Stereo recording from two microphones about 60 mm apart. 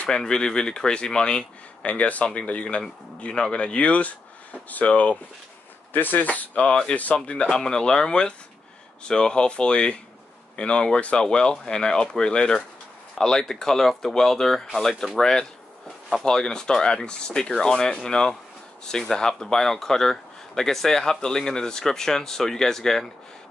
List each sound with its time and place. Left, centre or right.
0.0 s speech: centre